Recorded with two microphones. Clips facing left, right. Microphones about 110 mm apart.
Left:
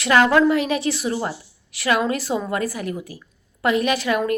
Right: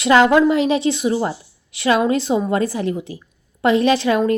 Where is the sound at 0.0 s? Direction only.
20° right (ahead or behind).